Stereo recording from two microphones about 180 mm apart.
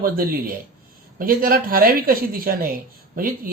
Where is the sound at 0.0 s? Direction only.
55° right (ahead or behind).